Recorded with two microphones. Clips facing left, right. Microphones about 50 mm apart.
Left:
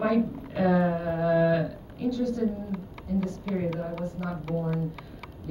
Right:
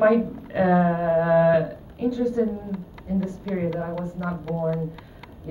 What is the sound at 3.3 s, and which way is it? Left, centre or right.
Speech, centre.